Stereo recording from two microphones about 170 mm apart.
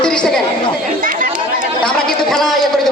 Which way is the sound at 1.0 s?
55° right (ahead or behind).